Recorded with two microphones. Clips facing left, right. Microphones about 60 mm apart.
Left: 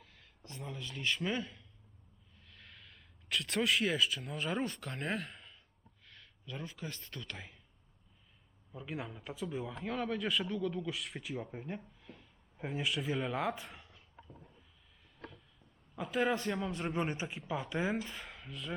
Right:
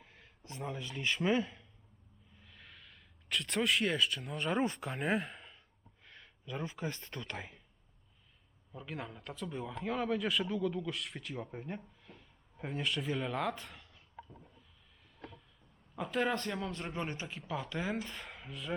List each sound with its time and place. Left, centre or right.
0.0 s a sound: right
0.7 s speech: centre
2.3 s a sound: centre
4.6 s speech: centre
8.7 s a man's voice: centre
16.0 s a man's voice: centre
17.9 s a man's voice: centre